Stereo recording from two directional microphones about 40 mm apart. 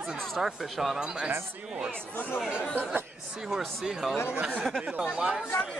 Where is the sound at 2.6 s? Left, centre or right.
Left.